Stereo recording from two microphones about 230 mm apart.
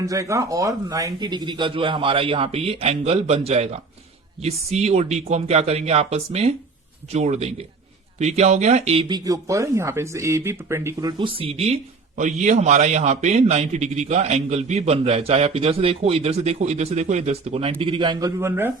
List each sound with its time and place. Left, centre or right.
0.0 s speech: centre